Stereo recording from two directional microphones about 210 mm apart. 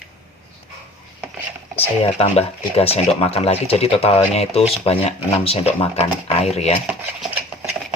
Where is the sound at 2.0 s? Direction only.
30° left (ahead or behind).